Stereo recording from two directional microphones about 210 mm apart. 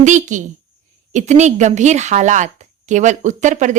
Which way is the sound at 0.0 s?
35° right (ahead or behind).